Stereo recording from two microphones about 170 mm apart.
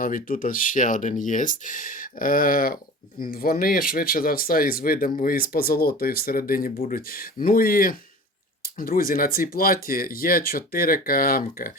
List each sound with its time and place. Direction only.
0.0 s speech: 55° left (ahead or behind)